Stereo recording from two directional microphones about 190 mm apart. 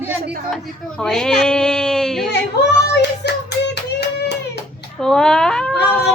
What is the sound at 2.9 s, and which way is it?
Child singing, 65° left (ahead or behind).